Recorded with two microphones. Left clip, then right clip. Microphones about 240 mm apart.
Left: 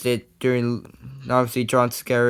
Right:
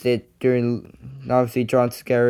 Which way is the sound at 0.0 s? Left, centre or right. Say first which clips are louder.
Right 2 dB; centre.